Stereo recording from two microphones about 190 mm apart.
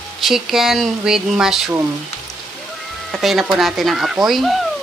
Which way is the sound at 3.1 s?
Centre (ahead or behind).